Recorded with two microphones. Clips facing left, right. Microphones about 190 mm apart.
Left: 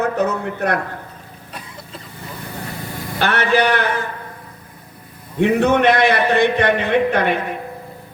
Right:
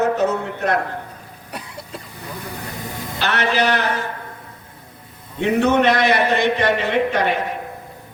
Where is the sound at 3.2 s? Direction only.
55° left (ahead or behind).